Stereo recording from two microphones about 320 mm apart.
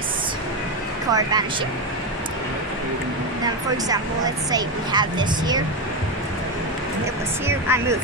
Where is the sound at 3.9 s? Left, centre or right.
Centre.